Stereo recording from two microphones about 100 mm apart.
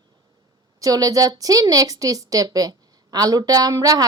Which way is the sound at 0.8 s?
35° right (ahead or behind).